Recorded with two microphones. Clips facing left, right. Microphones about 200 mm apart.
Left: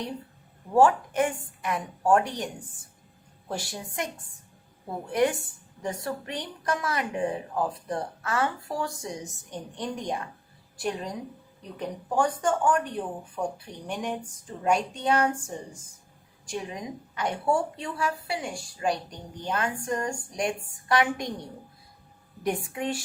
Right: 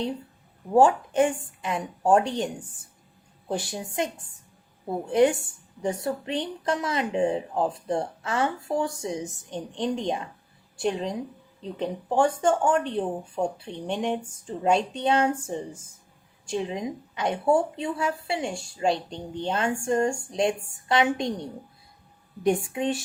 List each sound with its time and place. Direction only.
0.7 s speech: 25° right (ahead or behind)
3.5 s speech: 20° right (ahead or behind)
5.8 s speech: 25° right (ahead or behind)
22.7 s speech: 20° right (ahead or behind)